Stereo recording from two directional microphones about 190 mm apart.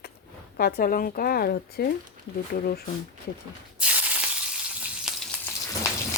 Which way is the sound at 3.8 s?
5° right (ahead or behind).